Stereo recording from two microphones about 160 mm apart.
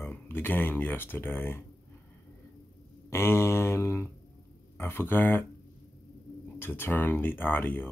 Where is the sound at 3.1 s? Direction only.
15° left (ahead or behind).